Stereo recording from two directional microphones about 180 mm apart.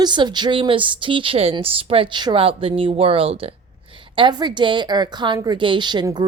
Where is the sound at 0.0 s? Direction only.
25° right (ahead or behind).